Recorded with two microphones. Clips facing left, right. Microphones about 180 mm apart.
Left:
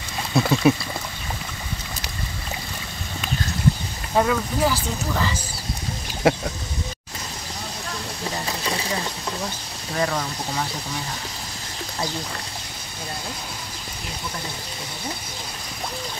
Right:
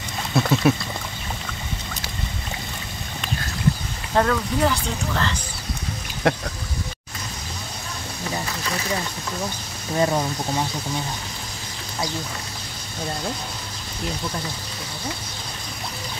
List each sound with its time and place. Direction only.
0.3 s speech: centre (ahead or behind)
4.1 s speech: 5° left (ahead or behind)
8.5 s speech: 30° left (ahead or behind)
9.9 s speech: 25° right (ahead or behind)